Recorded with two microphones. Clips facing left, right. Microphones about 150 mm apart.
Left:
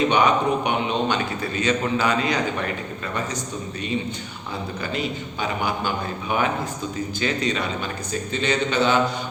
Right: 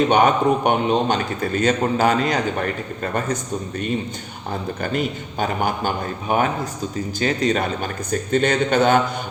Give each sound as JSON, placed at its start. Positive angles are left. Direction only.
{"t": 0.1, "sound": "a man's voice", "side_deg": -50}
{"t": 4.8, "sound": "a man's voice", "side_deg": -50}